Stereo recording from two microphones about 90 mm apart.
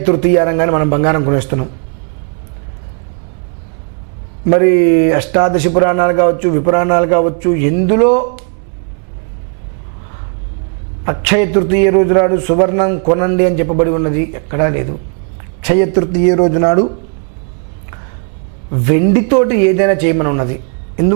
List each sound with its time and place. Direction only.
0.0 s a man's voice: 15° right (ahead or behind)
4.4 s a man's voice: 20° right (ahead or behind)
11.0 s a man's voice: 15° right (ahead or behind)
18.7 s a man's voice: 15° right (ahead or behind)